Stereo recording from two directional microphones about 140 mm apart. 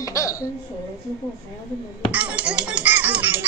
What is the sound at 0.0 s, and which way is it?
Hiccup, 25° left (ahead or behind).